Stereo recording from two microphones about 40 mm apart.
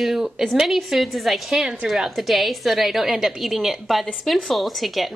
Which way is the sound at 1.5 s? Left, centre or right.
Centre.